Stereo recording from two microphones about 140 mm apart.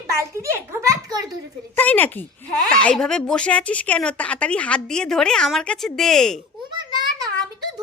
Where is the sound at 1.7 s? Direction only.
15° left (ahead or behind).